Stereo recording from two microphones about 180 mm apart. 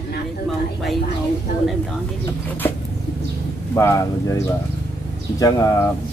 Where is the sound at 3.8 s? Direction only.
15° left (ahead or behind).